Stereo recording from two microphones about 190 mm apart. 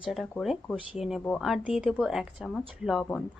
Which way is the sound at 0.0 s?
Centre (ahead or behind).